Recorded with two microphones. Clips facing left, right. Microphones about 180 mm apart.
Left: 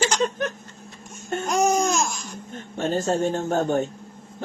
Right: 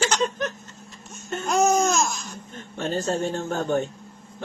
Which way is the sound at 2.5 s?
45° left (ahead or behind).